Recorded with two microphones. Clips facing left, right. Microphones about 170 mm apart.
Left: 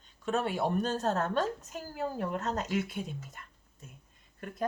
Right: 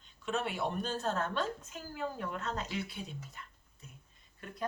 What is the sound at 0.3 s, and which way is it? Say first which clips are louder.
Speech: left 5 dB; 40° left (ahead or behind).